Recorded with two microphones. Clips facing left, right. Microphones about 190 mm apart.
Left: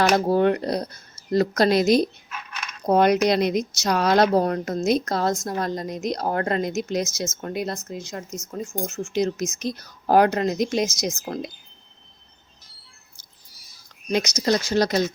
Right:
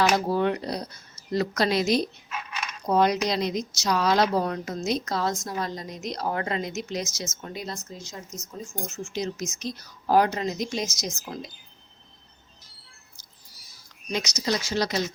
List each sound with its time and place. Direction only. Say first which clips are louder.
0.3 s a woman's voice: left 5 dB; 50° left (ahead or behind)
2.8 s a woman's voice: left 5 dB; 60° left (ahead or behind)
14.1 s a woman's voice: left 6 dB; 55° left (ahead or behind)